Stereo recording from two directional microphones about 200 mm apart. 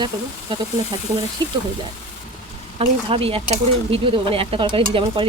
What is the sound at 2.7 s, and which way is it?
Speech, 30° right (ahead or behind).